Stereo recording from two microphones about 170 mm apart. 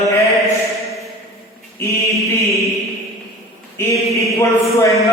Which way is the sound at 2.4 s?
20° left (ahead or behind).